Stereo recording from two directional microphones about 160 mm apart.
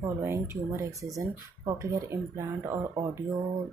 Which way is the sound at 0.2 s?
15° right (ahead or behind).